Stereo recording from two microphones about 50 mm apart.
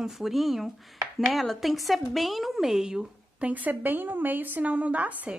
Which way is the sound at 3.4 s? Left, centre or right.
Right.